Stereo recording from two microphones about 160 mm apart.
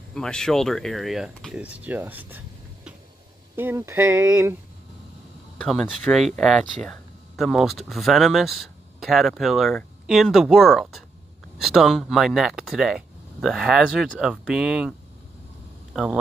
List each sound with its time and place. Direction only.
0.1 s speech: 5° left (ahead or behind); by 4.6 s 15° right (ahead or behind)
5.6 s speech: centre (ahead or behind)